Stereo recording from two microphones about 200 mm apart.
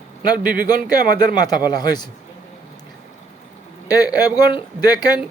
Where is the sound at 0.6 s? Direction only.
45° right (ahead or behind).